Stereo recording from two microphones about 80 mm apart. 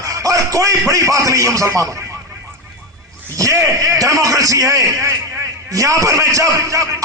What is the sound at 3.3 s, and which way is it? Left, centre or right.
A man's voice, right.